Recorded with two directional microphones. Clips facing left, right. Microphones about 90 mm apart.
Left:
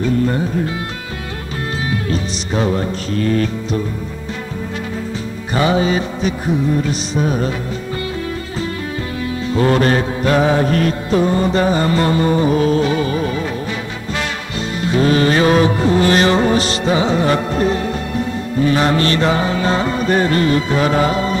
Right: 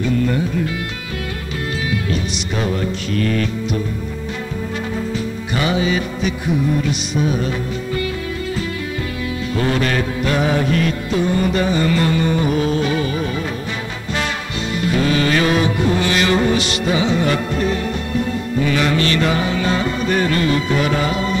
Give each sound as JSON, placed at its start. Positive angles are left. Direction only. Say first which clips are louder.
{"t": 0.3, "sound": "music", "louder": "left 1 dB", "side_deg": 30}
{"t": 2.0, "sound": "music", "louder": "left 1 dB", "side_deg": 35}
{"t": 5.5, "sound": "music", "louder": "left 4 dB", "side_deg": 35}
{"t": 9.5, "sound": "music", "louder": "left 5 dB", "side_deg": 35}
{"t": 14.9, "sound": "music", "louder": "left 4 dB", "side_deg": 35}